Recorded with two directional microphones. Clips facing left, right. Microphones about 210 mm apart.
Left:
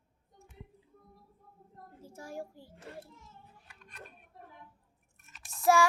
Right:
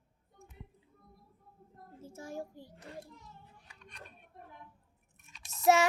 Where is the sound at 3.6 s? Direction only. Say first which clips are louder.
Left 2 dB; 5° left (ahead or behind).